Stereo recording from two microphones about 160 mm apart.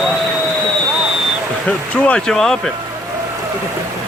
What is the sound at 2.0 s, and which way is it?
Speech, 5° left (ahead or behind).